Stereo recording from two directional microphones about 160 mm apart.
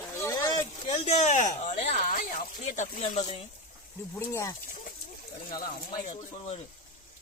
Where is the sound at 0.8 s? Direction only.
45° left (ahead or behind).